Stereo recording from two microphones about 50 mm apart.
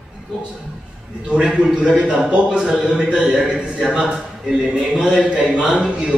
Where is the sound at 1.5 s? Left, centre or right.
Centre.